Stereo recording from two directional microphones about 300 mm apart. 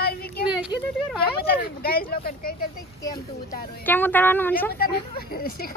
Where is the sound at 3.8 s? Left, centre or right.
Centre.